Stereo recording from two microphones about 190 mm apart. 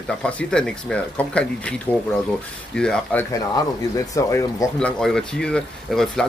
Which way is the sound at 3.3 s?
20° left (ahead or behind).